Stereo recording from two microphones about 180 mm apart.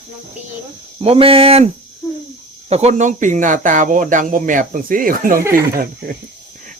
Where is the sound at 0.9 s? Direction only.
30° right (ahead or behind); by 6.2 s 55° right (ahead or behind).